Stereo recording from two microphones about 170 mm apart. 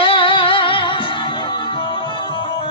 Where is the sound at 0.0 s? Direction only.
30° left (ahead or behind).